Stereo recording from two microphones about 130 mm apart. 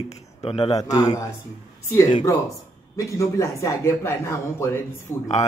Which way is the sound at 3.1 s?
25° left (ahead or behind).